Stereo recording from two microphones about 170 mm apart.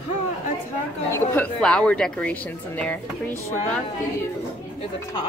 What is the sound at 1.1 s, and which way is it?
A woman's voice, 10° left (ahead or behind).